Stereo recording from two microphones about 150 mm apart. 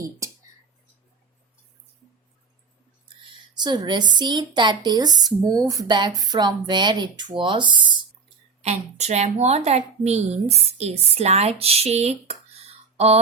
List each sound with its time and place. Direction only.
3.5 s a woman's voice: 30° right (ahead or behind)
8.6 s a woman's voice: 45° right (ahead or behind)